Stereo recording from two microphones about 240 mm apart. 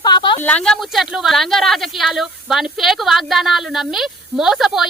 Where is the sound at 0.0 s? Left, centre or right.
Centre.